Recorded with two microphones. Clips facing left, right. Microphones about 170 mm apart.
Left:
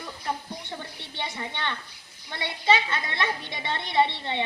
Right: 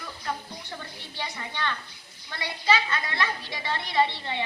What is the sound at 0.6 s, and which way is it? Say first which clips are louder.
Speech: left 2 dB; 25° left (ahead or behind).